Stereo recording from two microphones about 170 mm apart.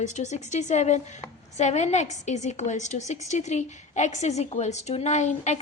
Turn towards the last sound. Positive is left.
turn(degrees=40)  # may be behind; listen again after turning